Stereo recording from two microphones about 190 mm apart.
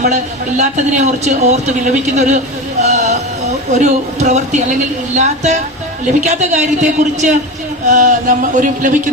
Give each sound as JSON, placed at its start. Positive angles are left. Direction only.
{"t": 0.0, "sound": "speech", "side_deg": -40}